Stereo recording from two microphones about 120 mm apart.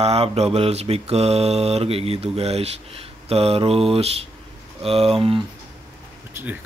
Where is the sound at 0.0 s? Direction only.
60° right (ahead or behind).